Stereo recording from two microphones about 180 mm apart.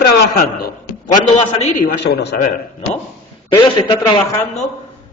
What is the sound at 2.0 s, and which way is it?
Speech, 70° left (ahead or behind).